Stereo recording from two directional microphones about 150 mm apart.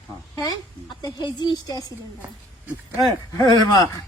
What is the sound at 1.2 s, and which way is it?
Speech, 30° left (ahead or behind).